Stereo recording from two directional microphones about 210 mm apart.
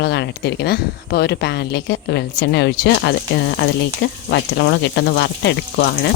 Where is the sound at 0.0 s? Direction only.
55° left (ahead or behind).